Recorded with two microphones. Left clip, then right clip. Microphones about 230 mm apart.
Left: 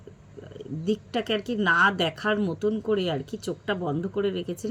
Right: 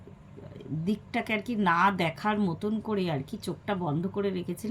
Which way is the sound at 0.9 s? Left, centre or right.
Centre.